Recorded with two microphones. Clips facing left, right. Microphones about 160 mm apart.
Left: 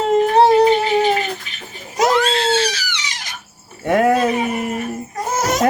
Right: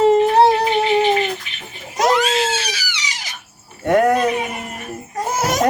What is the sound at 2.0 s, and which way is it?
Crying, 5° right (ahead or behind).